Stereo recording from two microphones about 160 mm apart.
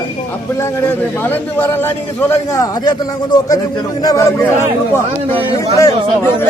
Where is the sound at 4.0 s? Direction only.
25° left (ahead or behind).